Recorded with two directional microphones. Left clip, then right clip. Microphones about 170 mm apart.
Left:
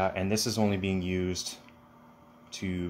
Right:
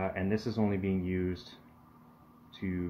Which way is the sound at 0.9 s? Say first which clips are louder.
Left 2 dB; 70° left (ahead or behind).